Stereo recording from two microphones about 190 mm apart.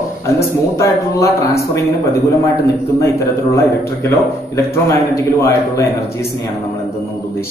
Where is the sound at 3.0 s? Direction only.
15° left (ahead or behind).